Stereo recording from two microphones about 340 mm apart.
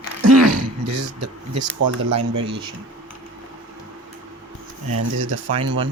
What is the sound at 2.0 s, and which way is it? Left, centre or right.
Speech, right.